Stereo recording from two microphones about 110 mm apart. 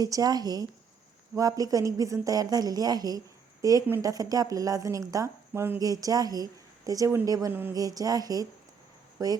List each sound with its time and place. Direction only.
0.0 s a woman's voice: 35° right (ahead or behind)